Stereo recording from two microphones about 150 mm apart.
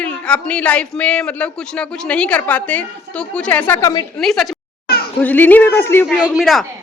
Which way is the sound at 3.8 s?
25° left (ahead or behind).